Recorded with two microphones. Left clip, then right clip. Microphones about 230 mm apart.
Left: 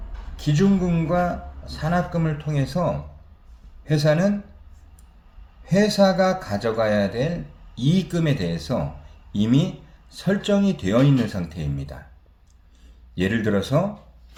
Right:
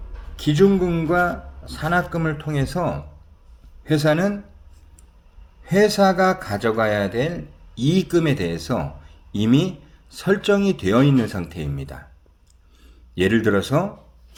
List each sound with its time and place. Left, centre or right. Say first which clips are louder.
0.3 s a man's voice: right 6 dB; right
5.6 s a man's voice: right 2 dB; right
13.1 s a man's voice: right 4 dB; right